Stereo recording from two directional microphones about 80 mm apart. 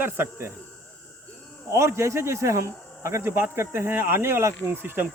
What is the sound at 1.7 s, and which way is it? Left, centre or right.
Speech, right.